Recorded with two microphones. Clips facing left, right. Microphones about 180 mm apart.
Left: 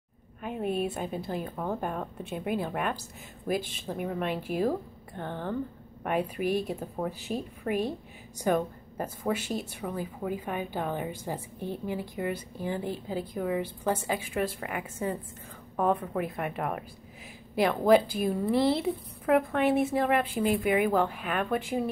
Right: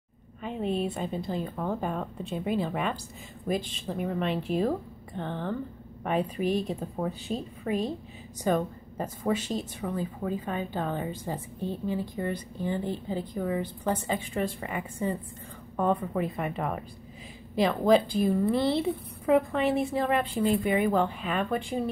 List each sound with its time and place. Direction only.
0.4 s a woman's voice: 5° left (ahead or behind)